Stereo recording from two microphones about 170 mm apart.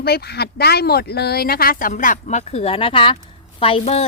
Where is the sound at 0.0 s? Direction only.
70° left (ahead or behind).